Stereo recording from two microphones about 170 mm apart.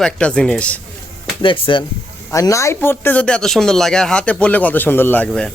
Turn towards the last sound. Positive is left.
turn(degrees=5)  # may be behind; listen again after turning